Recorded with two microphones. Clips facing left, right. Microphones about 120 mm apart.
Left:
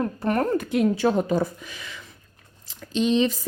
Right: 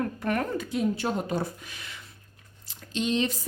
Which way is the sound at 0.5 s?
60° left (ahead or behind).